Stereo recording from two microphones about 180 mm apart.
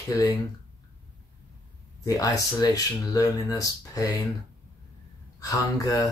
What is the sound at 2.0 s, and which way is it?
Speech, 20° left (ahead or behind).